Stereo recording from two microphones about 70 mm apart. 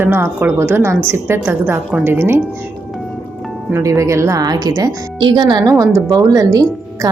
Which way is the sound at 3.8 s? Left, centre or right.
Right.